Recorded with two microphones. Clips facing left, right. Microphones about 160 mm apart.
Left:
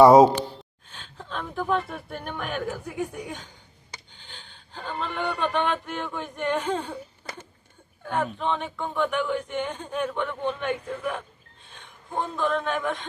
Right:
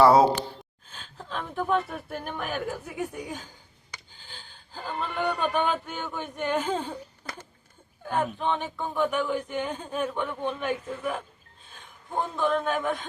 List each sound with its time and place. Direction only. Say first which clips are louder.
0.0 s speech: left 4 dB; 20° left (ahead or behind)
0.9 s speech: even; centre (ahead or behind)
8.0 s a man's voice: even; 5° right (ahead or behind)